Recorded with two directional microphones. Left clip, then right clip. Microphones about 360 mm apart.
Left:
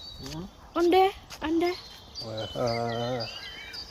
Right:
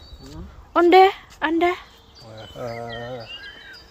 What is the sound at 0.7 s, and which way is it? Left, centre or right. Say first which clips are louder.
Speech: right 9 dB; centre.